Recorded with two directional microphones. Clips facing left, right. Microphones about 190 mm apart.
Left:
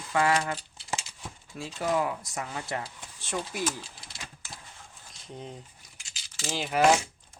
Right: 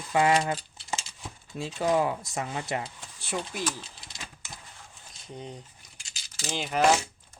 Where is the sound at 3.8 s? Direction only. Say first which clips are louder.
Even; 20° right (ahead or behind).